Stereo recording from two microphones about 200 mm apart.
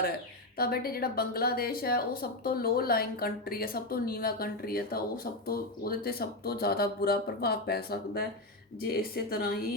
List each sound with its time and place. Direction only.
0.5 s a woman's voice: 50° left (ahead or behind)